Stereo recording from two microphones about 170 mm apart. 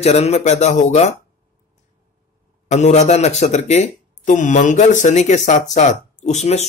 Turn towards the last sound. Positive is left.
turn(degrees=40)  # may be behind; listen again after turning